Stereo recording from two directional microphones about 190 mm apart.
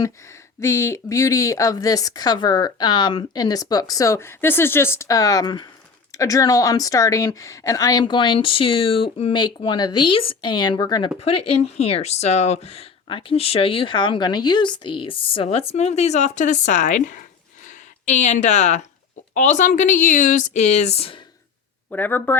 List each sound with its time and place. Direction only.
0.6 s speech: 15° left (ahead or behind)
11.2 s speech: 35° left (ahead or behind)
21.8 s speech: 10° left (ahead or behind)